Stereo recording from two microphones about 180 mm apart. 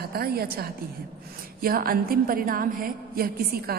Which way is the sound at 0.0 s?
60° right (ahead or behind).